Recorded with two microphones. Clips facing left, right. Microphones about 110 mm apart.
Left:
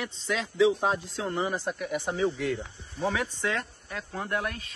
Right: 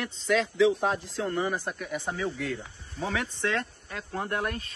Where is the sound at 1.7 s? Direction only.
5° left (ahead or behind).